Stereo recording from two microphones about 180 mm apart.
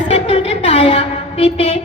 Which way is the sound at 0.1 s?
35° left (ahead or behind).